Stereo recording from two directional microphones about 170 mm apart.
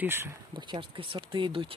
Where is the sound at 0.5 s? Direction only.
30° right (ahead or behind).